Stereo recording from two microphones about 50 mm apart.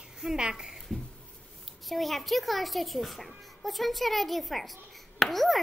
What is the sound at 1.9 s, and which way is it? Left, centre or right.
A child's voice, centre.